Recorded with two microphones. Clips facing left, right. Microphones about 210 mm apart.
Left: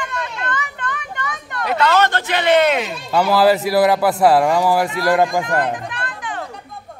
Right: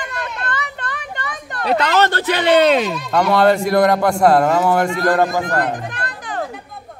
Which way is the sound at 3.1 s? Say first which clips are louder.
Even; 5° left (ahead or behind).